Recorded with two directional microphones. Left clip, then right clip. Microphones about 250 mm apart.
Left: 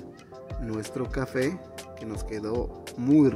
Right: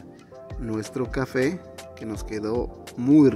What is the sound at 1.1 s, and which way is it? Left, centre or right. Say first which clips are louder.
Speech: right 4 dB; centre.